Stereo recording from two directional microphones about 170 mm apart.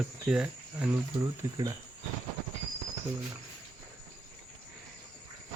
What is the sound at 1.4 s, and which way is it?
Cricket, 15° right (ahead or behind).